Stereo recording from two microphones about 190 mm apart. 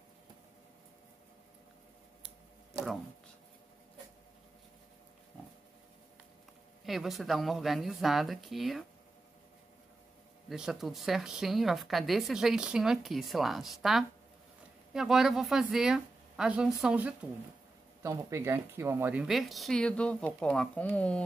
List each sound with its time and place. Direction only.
6.8 s speech: centre (ahead or behind)
10.5 s speech: 5° right (ahead or behind)